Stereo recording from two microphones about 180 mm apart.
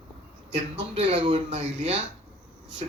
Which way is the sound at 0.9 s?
30° right (ahead or behind).